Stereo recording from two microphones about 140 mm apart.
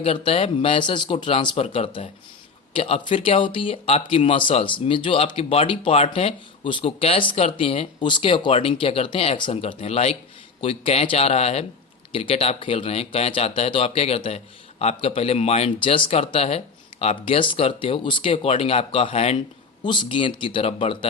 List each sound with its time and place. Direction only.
0.0 s a man's voice: 40° left (ahead or behind)
19.8 s speech: 35° left (ahead or behind)